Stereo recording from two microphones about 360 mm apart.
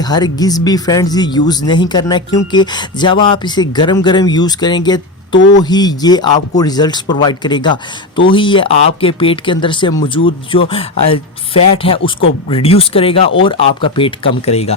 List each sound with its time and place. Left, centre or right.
0.0 s speech: centre